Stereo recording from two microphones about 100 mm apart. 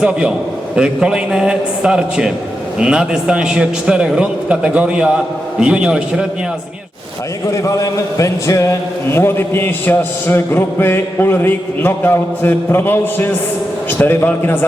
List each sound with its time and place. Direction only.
0.0 s a man's voice: 10° right (ahead or behind)
7.5 s a man's voice: 30° left (ahead or behind)